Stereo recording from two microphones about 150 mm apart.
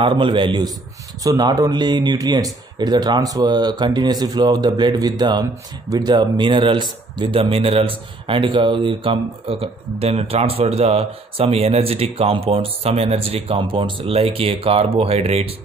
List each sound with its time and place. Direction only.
0.0 s speech: 35° right (ahead or behind)